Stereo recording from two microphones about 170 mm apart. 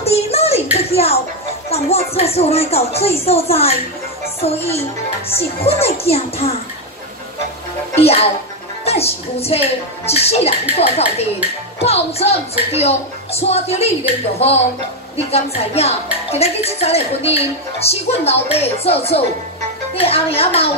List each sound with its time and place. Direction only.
0.0 s a sound: 35° left (ahead or behind)
1.7 s speech: 35° left (ahead or behind)
7.9 s speech: 35° left (ahead or behind)
15.1 s speech: 35° left (ahead or behind)